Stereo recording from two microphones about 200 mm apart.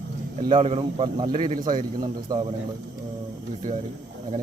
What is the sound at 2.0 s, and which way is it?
Speech, 20° right (ahead or behind).